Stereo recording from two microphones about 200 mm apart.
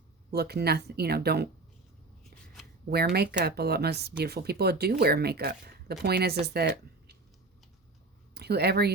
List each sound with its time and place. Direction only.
0.3 s speech: 55° right (ahead or behind)
2.9 s speech: 55° right (ahead or behind)
8.4 s speech: 55° right (ahead or behind)